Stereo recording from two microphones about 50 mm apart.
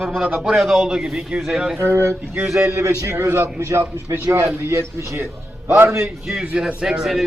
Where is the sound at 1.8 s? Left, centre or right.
Right.